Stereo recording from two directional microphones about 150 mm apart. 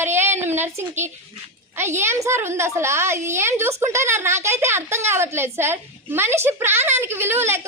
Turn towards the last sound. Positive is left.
turn(degrees=-15)  # may be behind; listen again after turning